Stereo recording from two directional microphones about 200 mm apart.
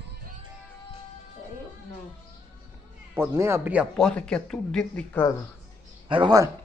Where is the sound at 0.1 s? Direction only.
45° right (ahead or behind).